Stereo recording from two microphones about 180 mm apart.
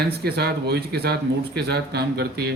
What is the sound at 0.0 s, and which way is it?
A man's voice, 65° right (ahead or behind).